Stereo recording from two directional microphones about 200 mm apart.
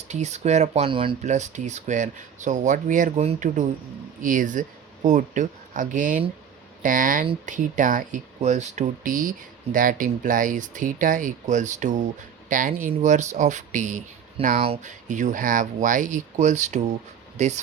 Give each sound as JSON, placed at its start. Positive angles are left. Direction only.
{"t": 0.1, "sound": "speech", "side_deg": -35}